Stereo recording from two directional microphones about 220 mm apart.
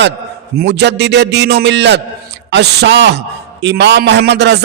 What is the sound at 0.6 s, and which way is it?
A man's voice, 50° right (ahead or behind).